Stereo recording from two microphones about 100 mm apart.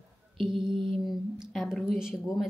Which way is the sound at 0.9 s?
Centre (ahead or behind).